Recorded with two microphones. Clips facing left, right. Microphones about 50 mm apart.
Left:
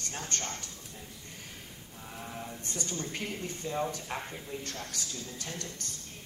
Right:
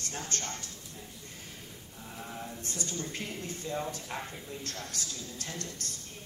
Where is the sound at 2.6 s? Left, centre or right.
Left.